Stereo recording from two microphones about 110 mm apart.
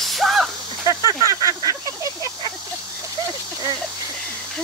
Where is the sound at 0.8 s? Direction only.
30° right (ahead or behind).